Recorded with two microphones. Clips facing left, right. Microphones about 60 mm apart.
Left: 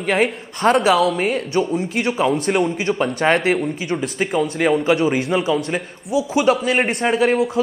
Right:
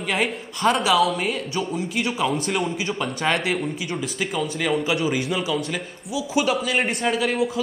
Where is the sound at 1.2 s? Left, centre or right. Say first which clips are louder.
Left 6 dB; left.